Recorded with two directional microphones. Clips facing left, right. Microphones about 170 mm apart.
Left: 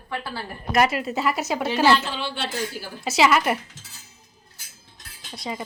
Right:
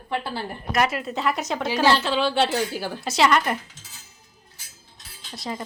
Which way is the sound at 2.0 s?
90° right.